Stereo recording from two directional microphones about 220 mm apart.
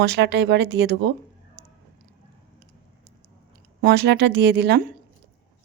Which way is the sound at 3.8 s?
50° right (ahead or behind).